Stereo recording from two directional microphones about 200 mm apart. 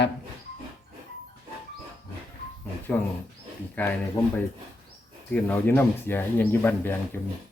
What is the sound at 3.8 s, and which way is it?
Speech, 10° left (ahead or behind).